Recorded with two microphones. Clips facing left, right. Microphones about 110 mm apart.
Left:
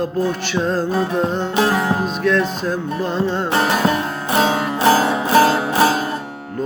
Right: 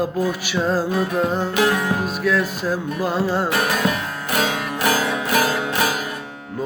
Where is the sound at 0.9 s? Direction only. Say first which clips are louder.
Left 1 dB; 30° left (ahead or behind).